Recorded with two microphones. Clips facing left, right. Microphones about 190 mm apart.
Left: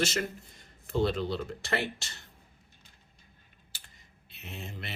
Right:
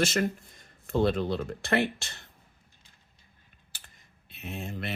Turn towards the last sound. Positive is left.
turn(degrees=-55)  # may be behind; listen again after turning